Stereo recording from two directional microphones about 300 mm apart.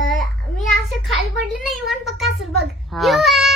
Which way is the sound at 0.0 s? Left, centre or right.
Centre.